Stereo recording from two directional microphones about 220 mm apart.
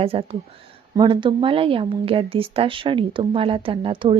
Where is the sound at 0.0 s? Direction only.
25° right (ahead or behind).